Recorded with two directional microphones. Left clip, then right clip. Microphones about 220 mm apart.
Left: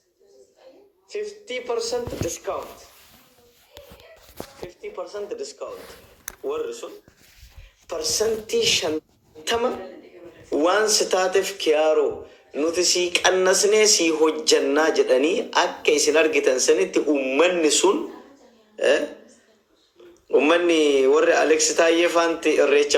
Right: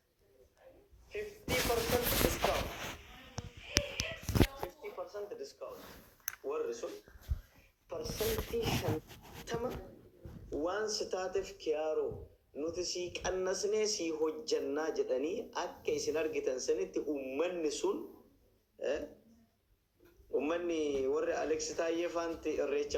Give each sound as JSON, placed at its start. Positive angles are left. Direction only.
{"t": 1.1, "sound": "speech", "side_deg": 30}
{"t": 4.6, "sound": "speech", "side_deg": 45}
{"t": 20.3, "sound": "speech", "side_deg": 45}